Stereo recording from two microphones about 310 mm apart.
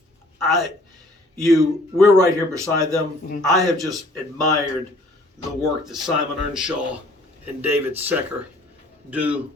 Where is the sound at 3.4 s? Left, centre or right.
Centre.